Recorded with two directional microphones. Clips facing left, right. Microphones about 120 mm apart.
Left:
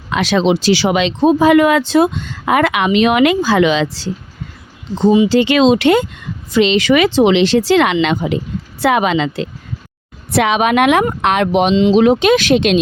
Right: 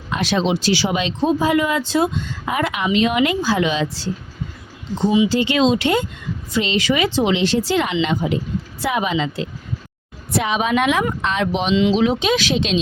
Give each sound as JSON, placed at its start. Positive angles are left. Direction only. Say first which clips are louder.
{"t": 0.1, "sound": "speech", "louder": "left 6 dB", "side_deg": 90}
{"t": 5.3, "sound": "speech", "louder": "left 6 dB", "side_deg": 75}
{"t": 11.7, "sound": "speech", "louder": "even", "side_deg": 35}
{"t": 11.9, "sound": "speech", "louder": "left 7 dB", "side_deg": 60}